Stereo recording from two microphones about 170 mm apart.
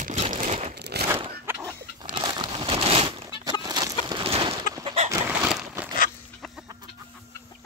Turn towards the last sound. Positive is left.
turn(degrees=0)  # may be behind; listen again after turning